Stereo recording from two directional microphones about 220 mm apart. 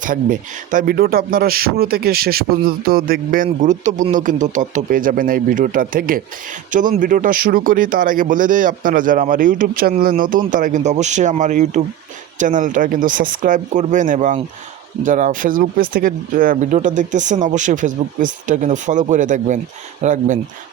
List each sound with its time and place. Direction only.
0.0 s speech: 35° right (ahead or behind)